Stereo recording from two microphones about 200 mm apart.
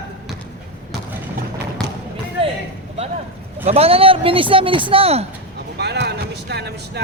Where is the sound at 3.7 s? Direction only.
30° right (ahead or behind).